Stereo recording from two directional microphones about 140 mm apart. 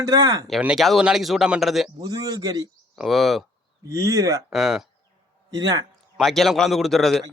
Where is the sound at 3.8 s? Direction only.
20° right (ahead or behind).